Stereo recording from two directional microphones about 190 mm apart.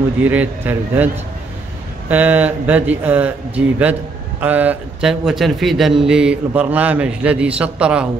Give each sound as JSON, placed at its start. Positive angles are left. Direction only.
{"t": 0.2, "sound": "speech", "side_deg": -10}